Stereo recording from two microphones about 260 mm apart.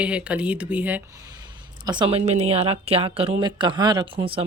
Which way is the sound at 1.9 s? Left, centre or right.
Centre.